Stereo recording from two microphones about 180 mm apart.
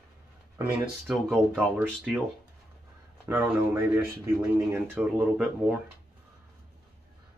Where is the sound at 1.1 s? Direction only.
Centre (ahead or behind).